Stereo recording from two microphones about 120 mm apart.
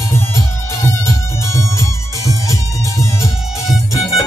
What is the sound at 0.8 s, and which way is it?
Music, 25° left (ahead or behind).